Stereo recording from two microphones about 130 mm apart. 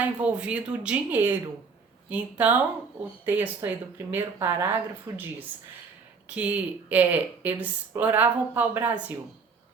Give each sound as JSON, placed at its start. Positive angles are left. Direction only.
{"t": 0.0, "sound": "speech", "side_deg": -10}